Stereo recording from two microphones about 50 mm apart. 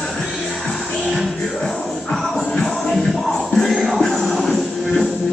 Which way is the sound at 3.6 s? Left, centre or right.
Centre.